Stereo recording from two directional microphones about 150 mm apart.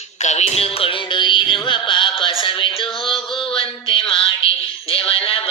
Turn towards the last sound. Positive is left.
turn(degrees=40)  # may be behind; listen again after turning